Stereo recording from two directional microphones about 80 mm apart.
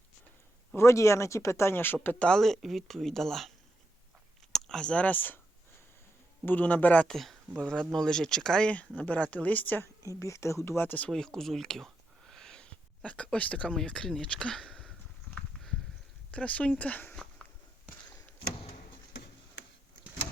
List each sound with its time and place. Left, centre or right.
0.8 s speech: left
2.2 s speech: centre
4.5 s speech: centre; by 5.4 s left
6.4 s speech: left
9.8 s speech: left
10.7 s speech: left
11.1 s speech: centre
16.3 s speech: centre
17.1 s a sound: centre